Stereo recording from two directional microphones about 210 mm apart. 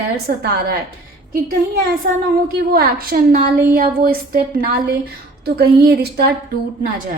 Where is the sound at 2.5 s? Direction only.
45° right (ahead or behind).